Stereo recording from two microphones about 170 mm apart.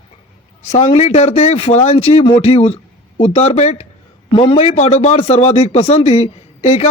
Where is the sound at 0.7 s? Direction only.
35° left (ahead or behind).